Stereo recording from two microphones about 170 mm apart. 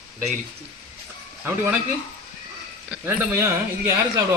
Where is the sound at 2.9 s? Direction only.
10° right (ahead or behind).